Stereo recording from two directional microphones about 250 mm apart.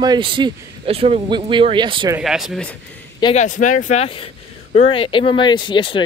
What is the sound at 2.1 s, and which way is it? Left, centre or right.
Speech, centre.